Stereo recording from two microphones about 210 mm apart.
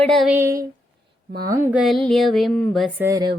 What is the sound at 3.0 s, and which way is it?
Child singing, 15° right (ahead or behind).